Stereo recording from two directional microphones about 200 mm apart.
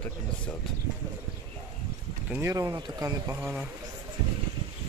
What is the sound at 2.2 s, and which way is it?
Speech, 10° right (ahead or behind).